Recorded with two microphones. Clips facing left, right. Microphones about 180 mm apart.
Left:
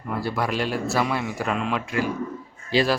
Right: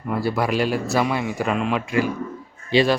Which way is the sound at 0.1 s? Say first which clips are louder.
Right 4 dB; 5° right (ahead or behind).